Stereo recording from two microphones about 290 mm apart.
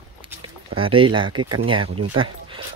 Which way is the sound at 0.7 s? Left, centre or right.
Centre.